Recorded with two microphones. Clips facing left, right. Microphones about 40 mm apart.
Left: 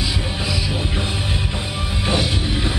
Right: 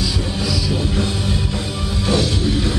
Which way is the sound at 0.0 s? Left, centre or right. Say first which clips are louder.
Right 2 dB; left.